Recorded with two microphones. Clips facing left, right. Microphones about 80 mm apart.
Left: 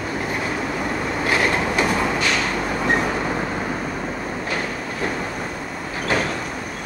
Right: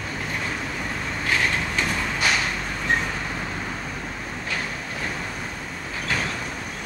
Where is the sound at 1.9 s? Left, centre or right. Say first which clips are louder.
Left 4 dB; left.